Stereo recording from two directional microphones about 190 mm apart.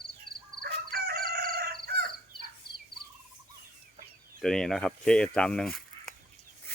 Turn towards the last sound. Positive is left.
turn(degrees=5)  # may be behind; listen again after turning